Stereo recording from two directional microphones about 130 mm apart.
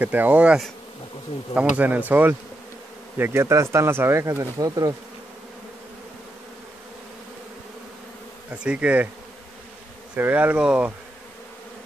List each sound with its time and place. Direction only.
0.0 s speech: 15° right (ahead or behind)
1.8 s speech: 10° right (ahead or behind); by 4.9 s 30° right (ahead or behind)
8.5 s speech: 10° right (ahead or behind)
10.1 s speech: 10° right (ahead or behind)